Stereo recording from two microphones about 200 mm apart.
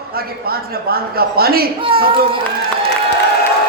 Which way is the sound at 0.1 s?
50° right (ahead or behind).